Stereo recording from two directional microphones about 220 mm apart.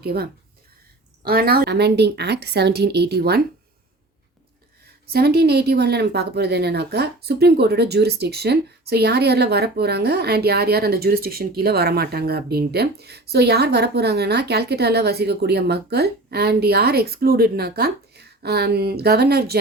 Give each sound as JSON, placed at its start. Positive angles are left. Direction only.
{"t": 0.0, "sound": "a woman's voice", "side_deg": -45}
{"t": 5.1, "sound": "a woman's voice", "side_deg": -45}